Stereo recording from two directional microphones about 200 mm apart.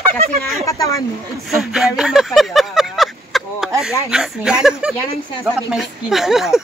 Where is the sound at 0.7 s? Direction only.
15° left (ahead or behind).